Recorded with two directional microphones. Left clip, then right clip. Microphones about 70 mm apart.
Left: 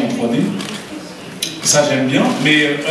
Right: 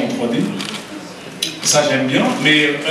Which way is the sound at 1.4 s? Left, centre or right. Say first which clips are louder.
Left 1 dB; right.